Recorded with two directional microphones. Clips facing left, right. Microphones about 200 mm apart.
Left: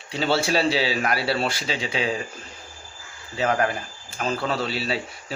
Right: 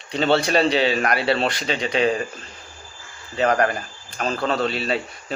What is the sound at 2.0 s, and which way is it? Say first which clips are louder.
Speech: right 7 dB; 60° right (ahead or behind).